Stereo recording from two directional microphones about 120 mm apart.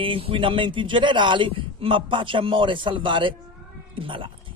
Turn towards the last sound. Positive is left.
turn(degrees=-45)  # may be behind; listen again after turning